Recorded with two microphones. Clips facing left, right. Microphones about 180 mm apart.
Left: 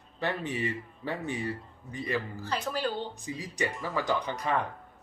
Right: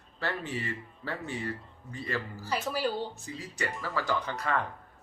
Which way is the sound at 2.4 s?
10° right (ahead or behind).